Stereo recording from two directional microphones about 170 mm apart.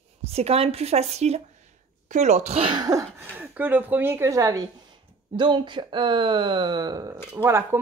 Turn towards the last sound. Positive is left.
turn(degrees=-10)  # may be behind; listen again after turning